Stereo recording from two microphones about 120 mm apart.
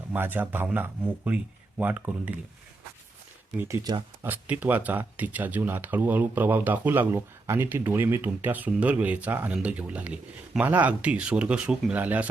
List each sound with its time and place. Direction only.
0.1 s speech: 15° right (ahead or behind)
4.2 s speech: 15° right (ahead or behind)